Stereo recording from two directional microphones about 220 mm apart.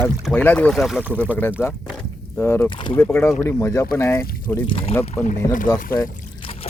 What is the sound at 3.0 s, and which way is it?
Speech, 10° left (ahead or behind).